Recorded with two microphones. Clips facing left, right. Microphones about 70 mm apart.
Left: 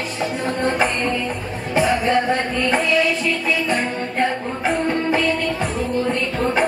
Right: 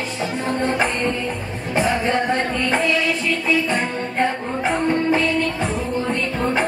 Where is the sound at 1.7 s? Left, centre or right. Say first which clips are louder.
Left 2 dB; right.